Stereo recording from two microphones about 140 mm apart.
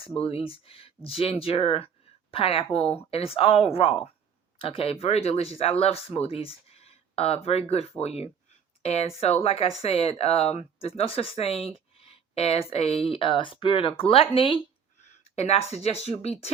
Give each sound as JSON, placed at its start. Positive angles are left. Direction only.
{"t": 0.0, "sound": "speech", "side_deg": 45}